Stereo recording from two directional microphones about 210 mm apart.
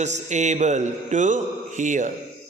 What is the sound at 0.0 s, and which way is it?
A man's voice, 35° right (ahead or behind).